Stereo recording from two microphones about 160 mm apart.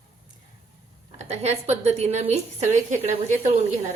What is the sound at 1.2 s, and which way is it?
A woman's voice, 45° right (ahead or behind).